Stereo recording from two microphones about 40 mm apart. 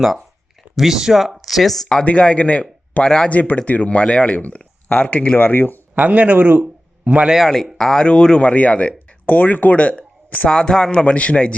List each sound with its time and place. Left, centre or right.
0.8 s speech: centre
2.0 s a man's voice: left
3.0 s a man's voice: left
3.2 s speech: left
5.4 s speech: left
5.9 s speech: right
7.3 s a man's voice: centre
8.4 s speech: left
9.2 s speech: left
10.5 s a man's voice: left
11.0 s speech: left